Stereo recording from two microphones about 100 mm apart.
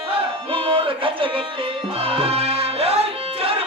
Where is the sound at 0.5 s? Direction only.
60° right (ahead or behind).